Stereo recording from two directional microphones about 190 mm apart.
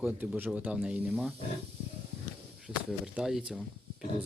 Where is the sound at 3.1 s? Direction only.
5° right (ahead or behind).